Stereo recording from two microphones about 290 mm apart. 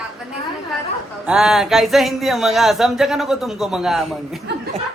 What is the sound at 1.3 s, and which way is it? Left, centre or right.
Speech, centre.